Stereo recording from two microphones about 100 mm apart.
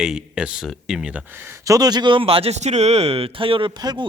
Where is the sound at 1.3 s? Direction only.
25° right (ahead or behind).